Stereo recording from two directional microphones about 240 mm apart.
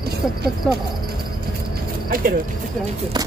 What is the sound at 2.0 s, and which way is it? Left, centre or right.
Speech, right.